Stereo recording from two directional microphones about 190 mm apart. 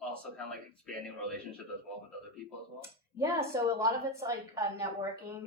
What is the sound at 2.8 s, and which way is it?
Speech, 15° right (ahead or behind).